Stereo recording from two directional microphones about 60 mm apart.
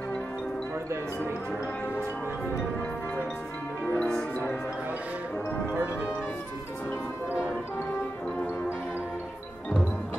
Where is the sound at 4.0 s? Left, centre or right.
Centre.